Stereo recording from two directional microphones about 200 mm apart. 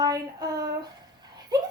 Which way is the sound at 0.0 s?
20° right (ahead or behind).